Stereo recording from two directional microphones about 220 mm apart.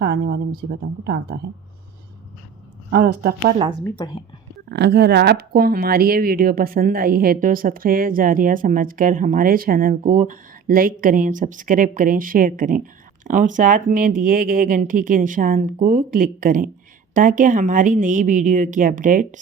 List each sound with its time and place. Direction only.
0.0 s a woman's voice: 45° right (ahead or behind)
2.9 s a woman's voice: 45° right (ahead or behind)
3.6 s a woman's voice: 20° right (ahead or behind)
3.8 s a woman's voice: 20° left (ahead or behind)
4.7 s speech: 50° right (ahead or behind)